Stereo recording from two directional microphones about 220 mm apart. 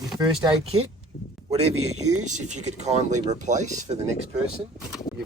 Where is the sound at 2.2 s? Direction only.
35° right (ahead or behind).